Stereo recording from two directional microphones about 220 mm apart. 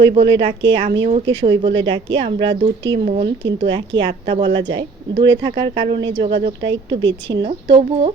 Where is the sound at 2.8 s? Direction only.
55° right (ahead or behind).